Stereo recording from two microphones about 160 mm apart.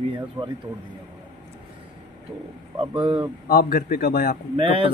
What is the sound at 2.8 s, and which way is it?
Speech, 30° right (ahead or behind).